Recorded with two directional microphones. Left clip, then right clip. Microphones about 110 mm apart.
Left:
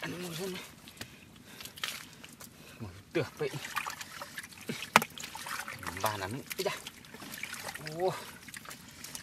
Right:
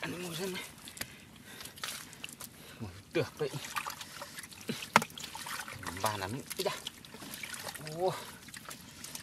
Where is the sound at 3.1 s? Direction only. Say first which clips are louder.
Even; 5° right (ahead or behind).